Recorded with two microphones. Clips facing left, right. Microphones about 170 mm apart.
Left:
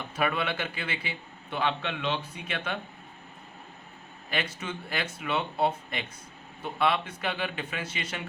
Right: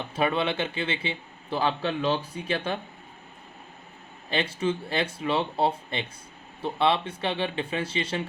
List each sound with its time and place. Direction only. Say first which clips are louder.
0.2 s a man's voice: right 4 dB; 25° right (ahead or behind)
4.3 s a man's voice: right 7 dB; 30° right (ahead or behind)